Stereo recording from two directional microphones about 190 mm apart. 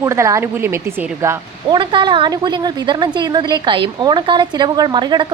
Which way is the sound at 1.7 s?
25° right (ahead or behind).